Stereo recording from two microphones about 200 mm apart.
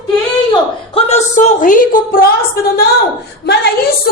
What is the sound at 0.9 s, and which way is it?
A woman's voice, 30° left (ahead or behind).